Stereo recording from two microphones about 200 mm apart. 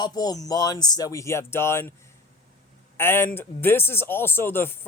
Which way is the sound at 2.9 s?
10° left (ahead or behind).